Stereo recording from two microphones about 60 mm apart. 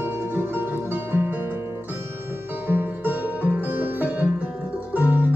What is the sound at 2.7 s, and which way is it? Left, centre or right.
Music, right.